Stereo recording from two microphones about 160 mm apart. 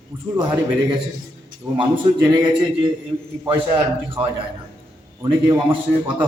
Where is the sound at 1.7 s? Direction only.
30° right (ahead or behind).